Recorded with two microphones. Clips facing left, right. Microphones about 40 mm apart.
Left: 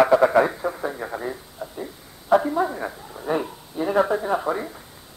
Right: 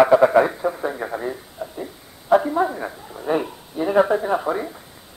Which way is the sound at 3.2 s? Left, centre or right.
Centre.